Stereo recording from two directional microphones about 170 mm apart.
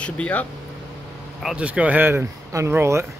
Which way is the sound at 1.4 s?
5° right (ahead or behind).